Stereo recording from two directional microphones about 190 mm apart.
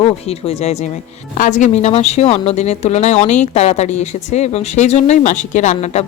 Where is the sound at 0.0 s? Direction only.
30° left (ahead or behind).